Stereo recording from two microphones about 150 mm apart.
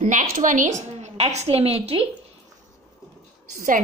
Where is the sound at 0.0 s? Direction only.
60° right (ahead or behind); by 2.0 s 40° right (ahead or behind).